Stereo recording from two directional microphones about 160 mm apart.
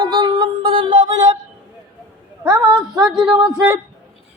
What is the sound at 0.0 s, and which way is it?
Music, 25° right (ahead or behind).